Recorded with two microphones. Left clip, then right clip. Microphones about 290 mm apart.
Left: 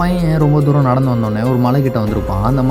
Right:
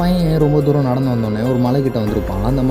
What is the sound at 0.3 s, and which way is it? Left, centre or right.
Speech, centre.